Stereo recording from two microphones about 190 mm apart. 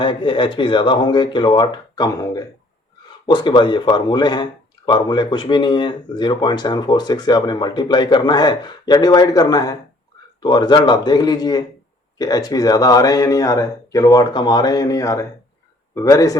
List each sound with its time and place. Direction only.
0.0 s speech: 25° left (ahead or behind)